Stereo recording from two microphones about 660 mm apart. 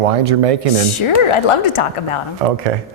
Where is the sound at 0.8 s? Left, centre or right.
Left.